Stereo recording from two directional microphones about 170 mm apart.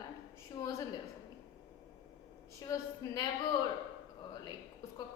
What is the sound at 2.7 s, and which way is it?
Speech, 20° left (ahead or behind).